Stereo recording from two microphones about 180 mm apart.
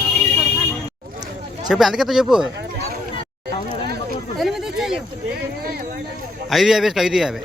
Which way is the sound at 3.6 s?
55° right (ahead or behind).